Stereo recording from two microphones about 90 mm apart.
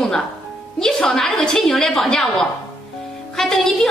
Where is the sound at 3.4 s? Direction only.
5° left (ahead or behind).